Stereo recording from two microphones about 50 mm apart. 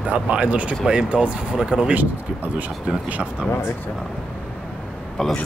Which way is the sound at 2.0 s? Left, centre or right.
Right.